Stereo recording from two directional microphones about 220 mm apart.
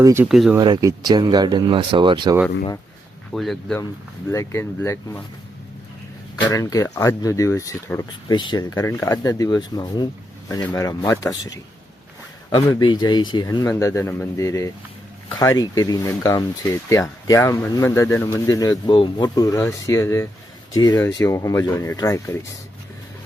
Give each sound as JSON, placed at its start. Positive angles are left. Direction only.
{"t": 0.0, "sound": "speech", "side_deg": -10}
{"t": 0.5, "sound": "speech", "side_deg": -20}
{"t": 3.3, "sound": "speech", "side_deg": 0}
{"t": 4.3, "sound": "speech", "side_deg": 10}
{"t": 6.5, "sound": "speech", "side_deg": 15}